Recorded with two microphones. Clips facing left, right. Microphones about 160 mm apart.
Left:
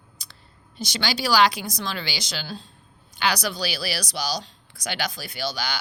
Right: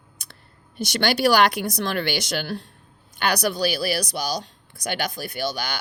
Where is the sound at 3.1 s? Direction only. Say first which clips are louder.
Right 3 dB; 55° right (ahead or behind).